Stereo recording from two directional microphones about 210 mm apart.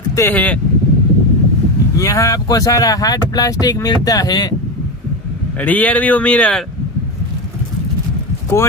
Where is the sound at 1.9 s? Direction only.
15° left (ahead or behind).